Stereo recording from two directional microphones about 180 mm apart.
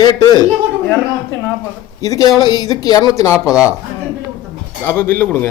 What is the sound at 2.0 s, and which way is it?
Speech, 20° left (ahead or behind).